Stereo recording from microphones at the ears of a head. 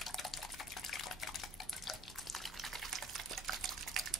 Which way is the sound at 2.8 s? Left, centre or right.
Right.